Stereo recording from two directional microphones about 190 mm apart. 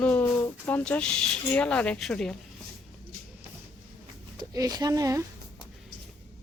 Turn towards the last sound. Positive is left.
turn(degrees=-15)  # may be behind; listen again after turning